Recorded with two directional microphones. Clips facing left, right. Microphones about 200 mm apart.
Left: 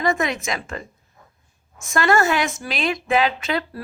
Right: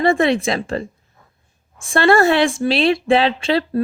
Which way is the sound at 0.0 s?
30° right (ahead or behind).